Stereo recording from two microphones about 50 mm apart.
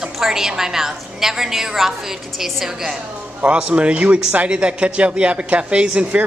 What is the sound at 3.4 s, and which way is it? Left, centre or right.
Speech, right.